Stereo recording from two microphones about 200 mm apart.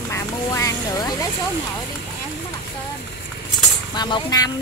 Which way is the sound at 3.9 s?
20° left (ahead or behind).